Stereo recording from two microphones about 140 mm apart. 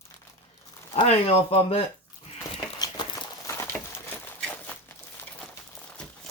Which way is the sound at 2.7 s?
30° left (ahead or behind).